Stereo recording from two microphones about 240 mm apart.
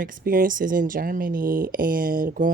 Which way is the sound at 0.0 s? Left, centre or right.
Right.